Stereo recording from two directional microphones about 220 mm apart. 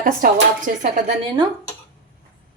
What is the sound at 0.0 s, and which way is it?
Speech, 40° right (ahead or behind).